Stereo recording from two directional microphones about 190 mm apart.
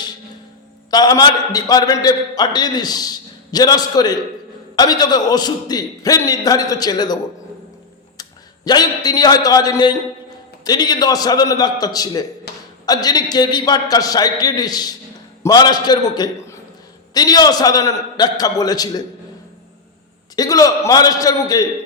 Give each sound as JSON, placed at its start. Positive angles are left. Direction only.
{"t": 0.9, "sound": "a man's voice", "side_deg": 20}
{"t": 8.2, "sound": "a man's voice", "side_deg": 20}
{"t": 12.5, "sound": "a sound", "side_deg": 60}
{"t": 12.8, "sound": "a man's voice", "side_deg": 20}
{"t": 20.3, "sound": "a man's voice", "side_deg": 20}